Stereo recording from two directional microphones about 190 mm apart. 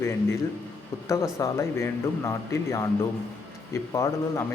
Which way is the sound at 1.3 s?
15° left (ahead or behind).